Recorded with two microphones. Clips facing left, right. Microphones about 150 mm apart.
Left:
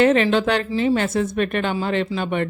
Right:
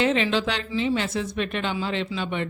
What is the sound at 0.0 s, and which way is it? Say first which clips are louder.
Speech: left 6 dB; 50° left (ahead or behind).